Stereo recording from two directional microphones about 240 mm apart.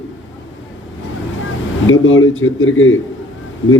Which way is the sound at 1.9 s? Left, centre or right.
Left.